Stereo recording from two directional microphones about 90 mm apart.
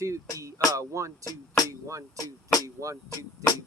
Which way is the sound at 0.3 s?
35° right (ahead or behind).